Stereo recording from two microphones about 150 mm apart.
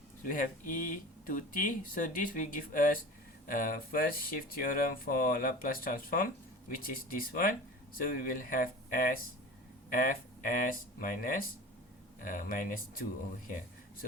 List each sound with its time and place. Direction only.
0.2 s speech: 65° left (ahead or behind)